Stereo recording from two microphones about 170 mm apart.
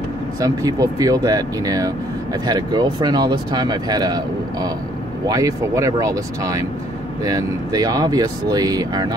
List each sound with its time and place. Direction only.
0.4 s speech: 20° right (ahead or behind)